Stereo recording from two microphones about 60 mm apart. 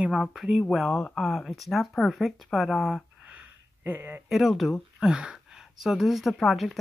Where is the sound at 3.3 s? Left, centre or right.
Right.